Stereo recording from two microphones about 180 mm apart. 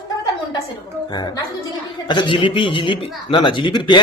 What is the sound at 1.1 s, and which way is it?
Speech, 25° left (ahead or behind).